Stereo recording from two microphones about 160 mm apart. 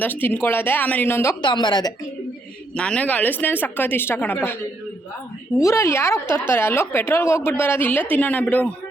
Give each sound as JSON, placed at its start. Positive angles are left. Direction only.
{"t": 0.0, "sound": "speech", "side_deg": 10}
{"t": 1.4, "sound": "speech", "side_deg": 30}
{"t": 2.7, "sound": "speech", "side_deg": 5}
{"t": 5.5, "sound": "speech", "side_deg": 20}